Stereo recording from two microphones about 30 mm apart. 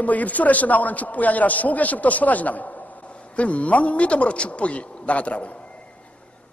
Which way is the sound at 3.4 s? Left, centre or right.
Left.